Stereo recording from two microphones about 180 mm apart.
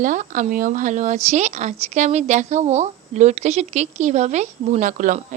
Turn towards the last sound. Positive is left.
turn(degrees=-45)  # may be behind; listen again after turning